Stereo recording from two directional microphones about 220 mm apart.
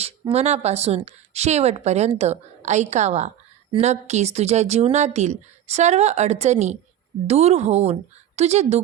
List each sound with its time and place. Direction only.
0.0 s a woman's voice: 30° right (ahead or behind)